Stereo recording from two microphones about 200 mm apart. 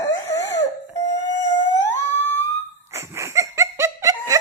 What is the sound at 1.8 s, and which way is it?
Music, 10° left (ahead or behind).